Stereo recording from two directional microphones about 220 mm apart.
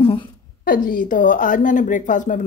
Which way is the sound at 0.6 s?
40° left (ahead or behind).